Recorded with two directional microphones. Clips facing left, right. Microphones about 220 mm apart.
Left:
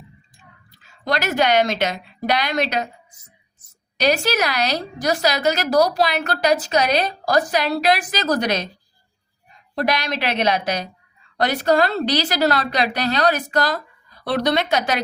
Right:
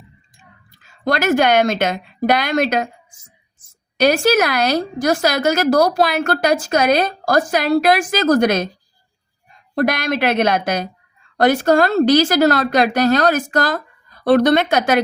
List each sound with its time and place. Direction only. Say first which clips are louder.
1.0 s a woman's voice: right 4 dB; 50° right (ahead or behind)
9.7 s a woman's voice: right 4 dB; 50° right (ahead or behind)